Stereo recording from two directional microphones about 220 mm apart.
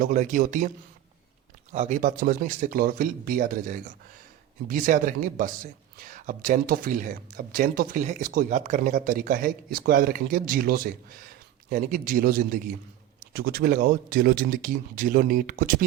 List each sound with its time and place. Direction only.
0.0 s speech: 35° right (ahead or behind)
1.7 s speech: 30° right (ahead or behind)